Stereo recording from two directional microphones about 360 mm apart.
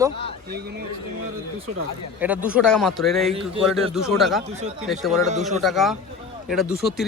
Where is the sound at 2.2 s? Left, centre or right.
Centre.